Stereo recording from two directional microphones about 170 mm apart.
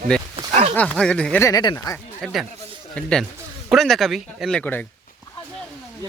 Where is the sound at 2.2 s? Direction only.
Centre (ahead or behind).